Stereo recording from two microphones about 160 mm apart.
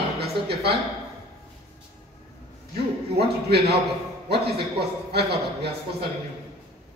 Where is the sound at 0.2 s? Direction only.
90° right.